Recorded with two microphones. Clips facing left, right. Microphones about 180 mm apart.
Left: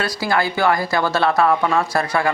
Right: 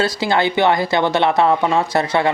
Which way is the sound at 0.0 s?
25° right (ahead or behind).